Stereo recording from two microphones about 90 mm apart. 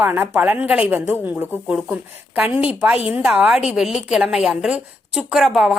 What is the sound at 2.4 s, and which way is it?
A woman's voice, 15° right (ahead or behind).